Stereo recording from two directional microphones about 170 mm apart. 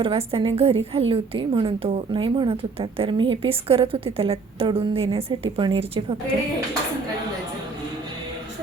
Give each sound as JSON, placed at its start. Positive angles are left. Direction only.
{"t": 0.0, "sound": "a woman's voice", "side_deg": -35}